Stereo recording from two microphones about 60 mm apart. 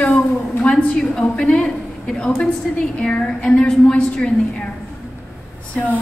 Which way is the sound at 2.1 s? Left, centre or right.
Centre.